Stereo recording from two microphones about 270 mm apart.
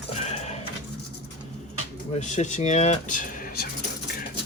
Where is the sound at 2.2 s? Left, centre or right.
Left.